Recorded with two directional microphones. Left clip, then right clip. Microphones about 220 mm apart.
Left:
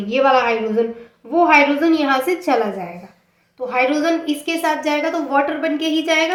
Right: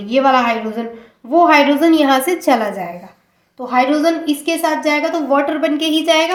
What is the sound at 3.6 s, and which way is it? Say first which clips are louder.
A woman's voice: right 3 dB; 40° right (ahead or behind).